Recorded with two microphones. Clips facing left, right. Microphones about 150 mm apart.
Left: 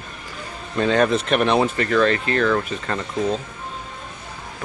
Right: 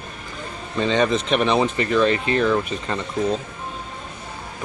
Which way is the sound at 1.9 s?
15° right (ahead or behind).